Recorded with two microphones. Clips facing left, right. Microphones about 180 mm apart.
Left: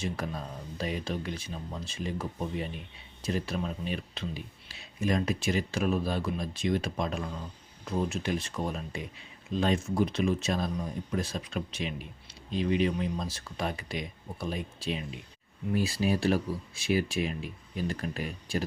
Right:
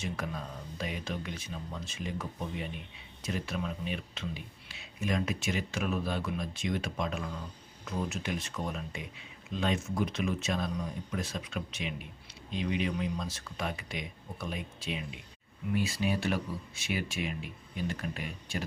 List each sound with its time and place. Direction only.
0.0 s speech: 35° left (ahead or behind)